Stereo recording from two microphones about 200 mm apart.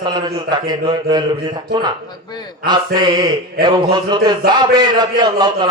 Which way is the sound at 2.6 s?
20° right (ahead or behind).